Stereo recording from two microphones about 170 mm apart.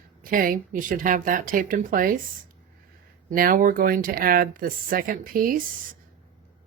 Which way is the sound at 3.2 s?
55° right (ahead or behind).